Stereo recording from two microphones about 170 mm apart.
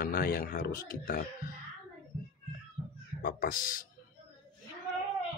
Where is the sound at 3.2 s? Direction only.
60° left (ahead or behind).